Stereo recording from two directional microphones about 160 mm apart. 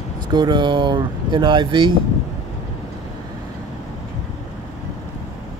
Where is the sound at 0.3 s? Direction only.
25° right (ahead or behind).